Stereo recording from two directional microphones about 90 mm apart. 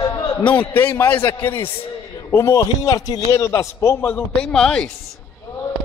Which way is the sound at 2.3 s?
35° left (ahead or behind).